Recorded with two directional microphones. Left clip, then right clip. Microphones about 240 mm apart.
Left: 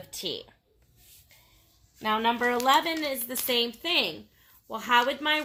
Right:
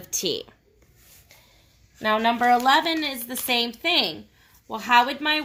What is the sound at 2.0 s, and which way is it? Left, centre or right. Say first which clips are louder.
Speech: right 4 dB; right.